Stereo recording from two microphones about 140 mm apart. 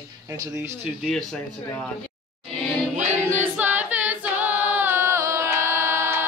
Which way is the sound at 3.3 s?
15° right (ahead or behind).